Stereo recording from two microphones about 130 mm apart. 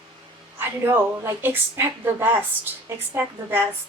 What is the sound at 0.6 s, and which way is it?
Speech, 15° right (ahead or behind).